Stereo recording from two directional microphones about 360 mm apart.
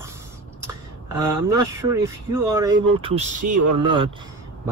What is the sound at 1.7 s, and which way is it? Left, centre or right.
Speech, centre.